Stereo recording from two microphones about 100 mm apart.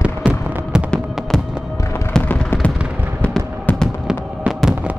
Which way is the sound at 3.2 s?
10° left (ahead or behind).